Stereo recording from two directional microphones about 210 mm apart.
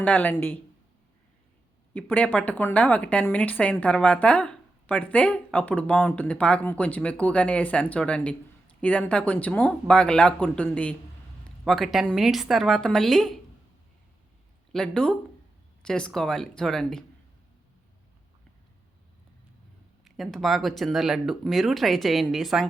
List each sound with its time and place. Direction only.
0.0 s a woman's voice: 5° left (ahead or behind)
1.9 s a woman's voice: 5° left (ahead or behind)
14.7 s speech: 5° left (ahead or behind)
20.1 s speech: centre (ahead or behind)